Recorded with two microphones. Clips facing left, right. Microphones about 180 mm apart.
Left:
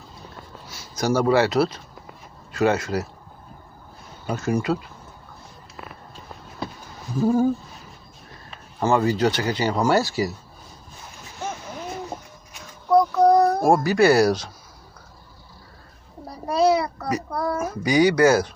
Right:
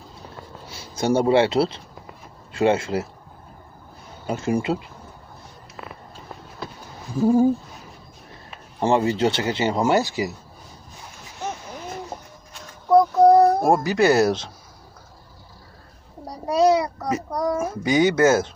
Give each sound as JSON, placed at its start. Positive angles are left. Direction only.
{"t": 0.7, "sound": "speech", "side_deg": -30}
{"t": 4.3, "sound": "speech", "side_deg": -25}
{"t": 8.8, "sound": "speech", "side_deg": -30}
{"t": 12.9, "sound": "a sound", "side_deg": -25}
{"t": 16.2, "sound": "a child's voice", "side_deg": -20}